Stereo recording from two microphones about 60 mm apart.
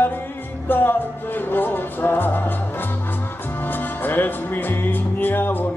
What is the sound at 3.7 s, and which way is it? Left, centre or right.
Music, left.